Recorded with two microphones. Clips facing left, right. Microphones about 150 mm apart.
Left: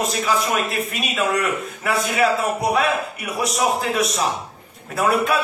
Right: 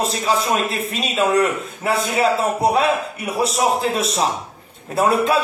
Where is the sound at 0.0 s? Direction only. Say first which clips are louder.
Right 1 dB; 30° right (ahead or behind).